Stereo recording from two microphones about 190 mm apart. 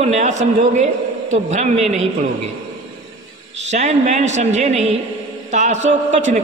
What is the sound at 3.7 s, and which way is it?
A man's voice, 35° right (ahead or behind).